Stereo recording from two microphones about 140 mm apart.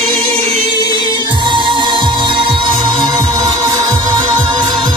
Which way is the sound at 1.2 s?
35° right (ahead or behind).